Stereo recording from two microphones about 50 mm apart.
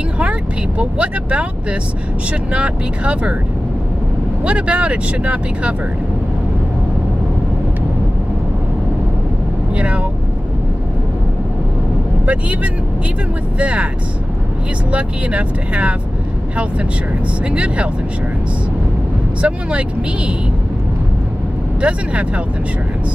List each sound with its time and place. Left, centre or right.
0.2 s speech: right
4.5 s speech: right
9.8 s vehicle: right
12.3 s speech: right
14.9 s speech: right
17.5 s speech: right
19.4 s speech: right
21.8 s speech: right